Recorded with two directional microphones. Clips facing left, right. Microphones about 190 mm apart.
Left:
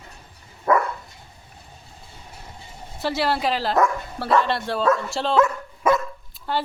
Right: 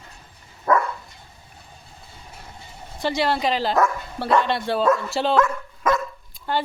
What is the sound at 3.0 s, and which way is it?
Speech, 5° left (ahead or behind).